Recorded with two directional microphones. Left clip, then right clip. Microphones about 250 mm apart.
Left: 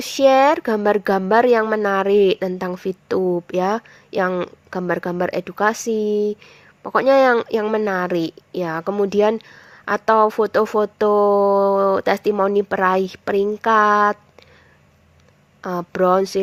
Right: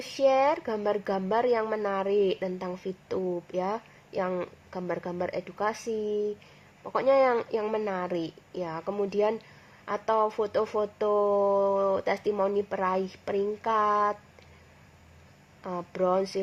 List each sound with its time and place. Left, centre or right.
0.2 s a woman's voice: left
15.6 s a woman's voice: left